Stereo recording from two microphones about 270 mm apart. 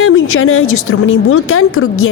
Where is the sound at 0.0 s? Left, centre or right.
Left.